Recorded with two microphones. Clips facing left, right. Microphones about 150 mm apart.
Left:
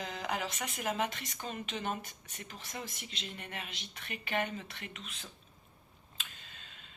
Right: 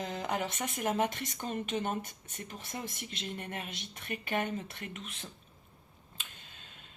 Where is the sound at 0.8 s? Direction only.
50° right (ahead or behind).